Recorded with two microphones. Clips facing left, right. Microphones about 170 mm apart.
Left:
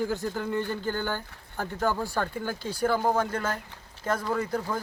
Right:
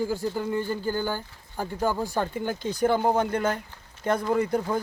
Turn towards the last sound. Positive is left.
turn(degrees=-20)  # may be behind; listen again after turning